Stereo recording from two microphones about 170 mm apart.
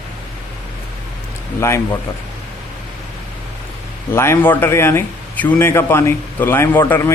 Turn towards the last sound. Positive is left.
turn(degrees=10)  # may be behind; listen again after turning